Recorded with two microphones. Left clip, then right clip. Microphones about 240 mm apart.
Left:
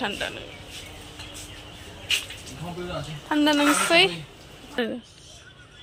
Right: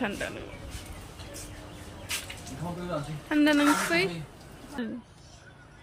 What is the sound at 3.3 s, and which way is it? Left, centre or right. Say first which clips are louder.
A woman's voice: left 3 dB; centre.